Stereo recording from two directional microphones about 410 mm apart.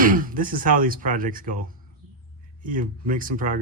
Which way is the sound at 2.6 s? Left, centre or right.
Centre.